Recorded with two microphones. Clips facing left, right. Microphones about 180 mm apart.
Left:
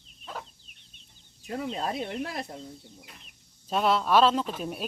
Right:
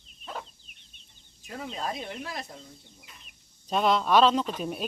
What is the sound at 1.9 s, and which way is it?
Speech, 60° left (ahead or behind).